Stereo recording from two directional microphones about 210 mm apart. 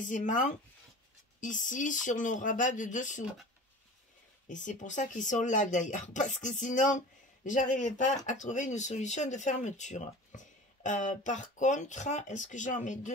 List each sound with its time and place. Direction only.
0.0 s speech: 35° left (ahead or behind)
4.5 s speech: 35° left (ahead or behind)